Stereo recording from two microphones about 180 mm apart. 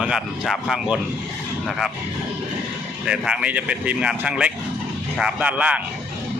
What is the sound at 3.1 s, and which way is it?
Speech, 5° right (ahead or behind).